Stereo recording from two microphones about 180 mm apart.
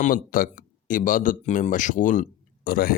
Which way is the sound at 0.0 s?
50° left (ahead or behind).